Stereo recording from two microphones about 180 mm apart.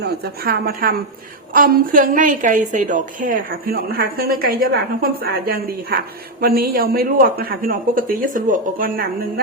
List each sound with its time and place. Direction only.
0.0 s a woman's voice: 60° right (ahead or behind)